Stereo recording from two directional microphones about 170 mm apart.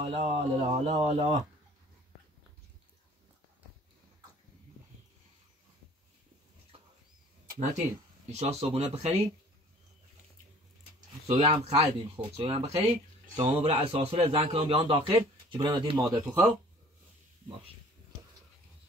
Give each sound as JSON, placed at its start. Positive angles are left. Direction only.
{"t": 0.0, "sound": "a man's voice", "side_deg": -35}
{"t": 8.3, "sound": "a man's voice", "side_deg": -40}
{"t": 11.2, "sound": "a man's voice", "side_deg": -35}
{"t": 16.3, "sound": "speech", "side_deg": -5}